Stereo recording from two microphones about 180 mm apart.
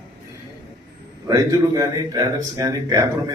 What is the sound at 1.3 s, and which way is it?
Speech, 20° right (ahead or behind).